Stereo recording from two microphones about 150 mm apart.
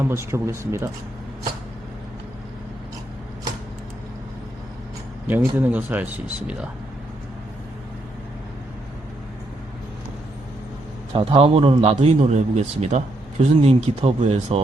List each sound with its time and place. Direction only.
0.0 s speech: 15° right (ahead or behind)
5.3 s speech: 10° right (ahead or behind)
11.3 s a man's voice: 40° right (ahead or behind)